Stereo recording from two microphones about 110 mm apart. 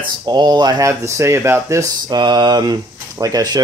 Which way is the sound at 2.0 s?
40° right (ahead or behind).